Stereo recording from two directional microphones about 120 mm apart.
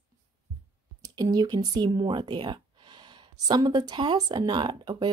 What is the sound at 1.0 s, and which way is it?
Speech, 35° right (ahead or behind).